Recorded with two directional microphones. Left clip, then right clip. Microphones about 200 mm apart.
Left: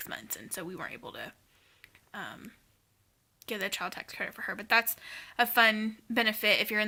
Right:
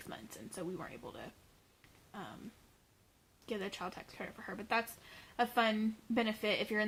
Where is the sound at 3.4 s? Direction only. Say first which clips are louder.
Left 7 dB; 10° left (ahead or behind).